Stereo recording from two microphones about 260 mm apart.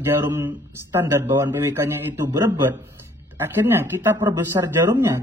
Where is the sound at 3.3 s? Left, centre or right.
Centre.